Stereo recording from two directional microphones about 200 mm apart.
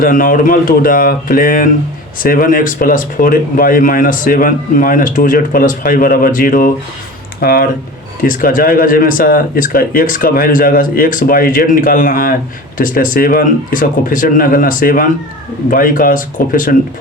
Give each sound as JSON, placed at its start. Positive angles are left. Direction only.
{"t": 0.0, "sound": "speech", "side_deg": 45}